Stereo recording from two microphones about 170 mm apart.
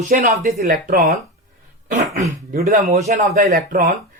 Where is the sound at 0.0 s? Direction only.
50° right (ahead or behind).